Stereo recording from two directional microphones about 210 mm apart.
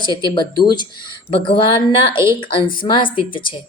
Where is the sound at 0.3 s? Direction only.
20° left (ahead or behind).